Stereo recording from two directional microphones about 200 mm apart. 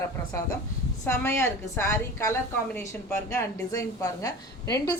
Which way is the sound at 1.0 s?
15° left (ahead or behind).